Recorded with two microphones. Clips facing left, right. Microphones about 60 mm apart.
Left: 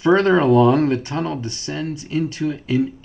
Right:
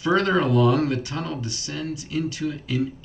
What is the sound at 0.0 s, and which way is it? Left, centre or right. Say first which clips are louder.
Speech: left 6 dB; left.